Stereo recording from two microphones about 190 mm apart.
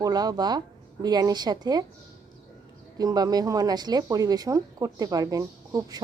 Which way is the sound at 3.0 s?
20° right (ahead or behind).